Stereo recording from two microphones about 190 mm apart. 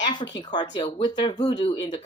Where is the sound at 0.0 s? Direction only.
25° left (ahead or behind).